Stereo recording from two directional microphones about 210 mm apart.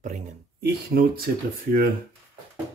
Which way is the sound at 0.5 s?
50° right (ahead or behind).